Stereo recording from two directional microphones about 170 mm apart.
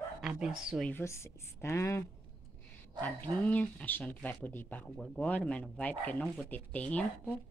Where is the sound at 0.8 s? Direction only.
15° left (ahead or behind).